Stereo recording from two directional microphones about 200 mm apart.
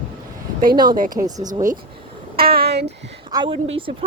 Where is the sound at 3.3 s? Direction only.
20° right (ahead or behind).